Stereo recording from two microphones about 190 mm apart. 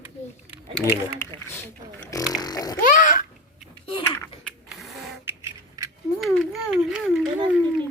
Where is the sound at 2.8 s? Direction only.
45° left (ahead or behind).